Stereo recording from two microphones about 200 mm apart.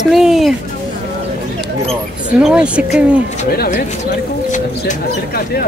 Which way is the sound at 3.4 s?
50° left (ahead or behind).